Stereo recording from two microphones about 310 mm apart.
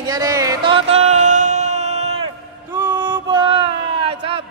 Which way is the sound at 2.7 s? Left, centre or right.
Centre.